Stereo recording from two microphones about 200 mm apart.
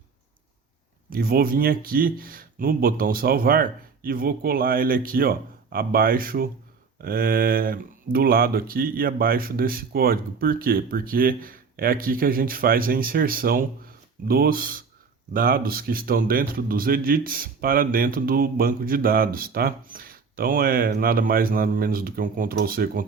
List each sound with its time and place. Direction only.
1.1 s speech: 50° right (ahead or behind)